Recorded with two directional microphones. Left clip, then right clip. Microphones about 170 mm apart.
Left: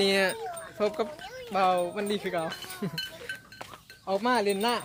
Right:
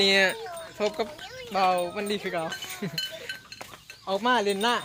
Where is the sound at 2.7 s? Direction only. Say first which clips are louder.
Right 1 dB; 5° left (ahead or behind).